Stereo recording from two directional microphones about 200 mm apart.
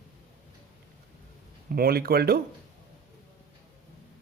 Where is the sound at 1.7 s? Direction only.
50° right (ahead or behind).